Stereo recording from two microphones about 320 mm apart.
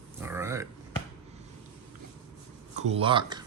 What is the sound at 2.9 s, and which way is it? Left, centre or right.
Speech, centre.